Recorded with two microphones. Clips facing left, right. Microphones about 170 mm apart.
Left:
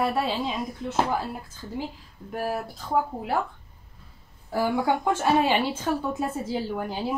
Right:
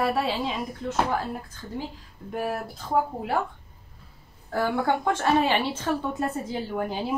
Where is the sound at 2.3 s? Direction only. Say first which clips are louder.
Even; centre (ahead or behind).